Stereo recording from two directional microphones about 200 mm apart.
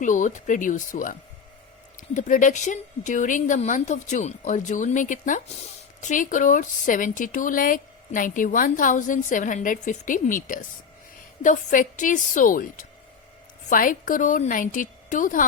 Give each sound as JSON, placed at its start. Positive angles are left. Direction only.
{"t": 0.0, "sound": "a woman's voice", "side_deg": 40}